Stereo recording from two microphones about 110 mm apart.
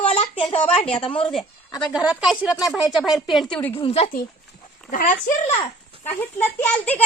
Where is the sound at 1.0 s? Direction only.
55° left (ahead or behind).